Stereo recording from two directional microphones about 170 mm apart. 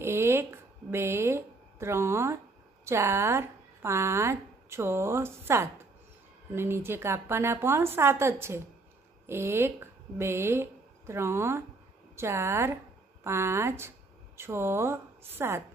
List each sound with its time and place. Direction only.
0.0 s a woman's voice: 15° right (ahead or behind)